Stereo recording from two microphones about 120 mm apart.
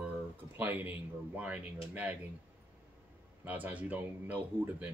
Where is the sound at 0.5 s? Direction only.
15° right (ahead or behind).